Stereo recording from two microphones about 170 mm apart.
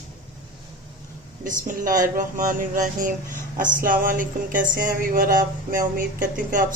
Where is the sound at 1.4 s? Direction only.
50° right (ahead or behind).